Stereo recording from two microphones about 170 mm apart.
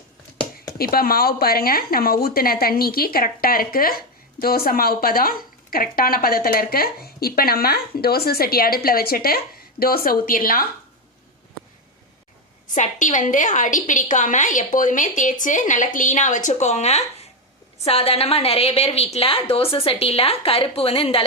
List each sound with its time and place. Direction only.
0.3 s a sound: 20° left (ahead or behind)
0.8 s speech: 60° left (ahead or behind)
12.6 s a woman's voice: 50° left (ahead or behind)